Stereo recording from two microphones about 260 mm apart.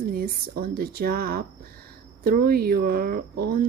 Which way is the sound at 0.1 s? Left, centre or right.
Right.